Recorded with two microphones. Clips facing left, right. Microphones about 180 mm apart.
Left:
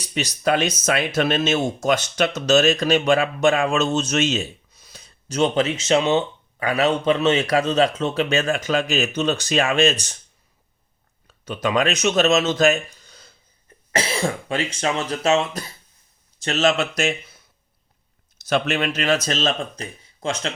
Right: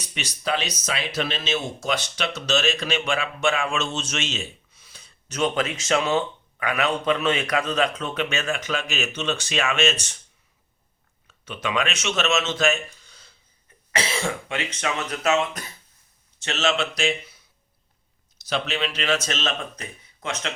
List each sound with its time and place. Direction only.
0.0 s speech: 40° left (ahead or behind)
5.4 s speech: 25° left (ahead or behind)
11.3 s speech: 40° left (ahead or behind)
18.4 s speech: 50° left (ahead or behind); by 20.5 s 30° left (ahead or behind)